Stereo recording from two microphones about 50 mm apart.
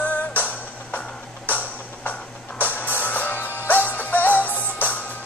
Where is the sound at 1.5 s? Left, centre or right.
Left.